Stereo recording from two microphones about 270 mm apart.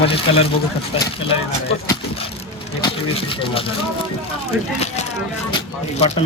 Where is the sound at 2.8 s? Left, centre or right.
Centre.